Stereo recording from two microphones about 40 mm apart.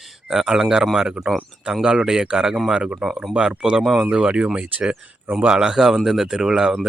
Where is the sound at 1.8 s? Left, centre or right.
Centre.